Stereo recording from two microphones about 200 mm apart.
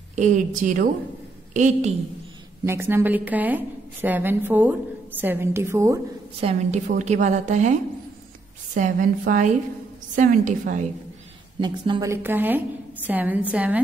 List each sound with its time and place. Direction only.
0.1 s a woman's voice: 35° right (ahead or behind)
2.6 s a woman's voice: 10° right (ahead or behind)
6.4 s a woman's voice: 35° right (ahead or behind)
8.7 s a woman's voice: 40° right (ahead or behind)
11.6 s a woman's voice: 20° right (ahead or behind)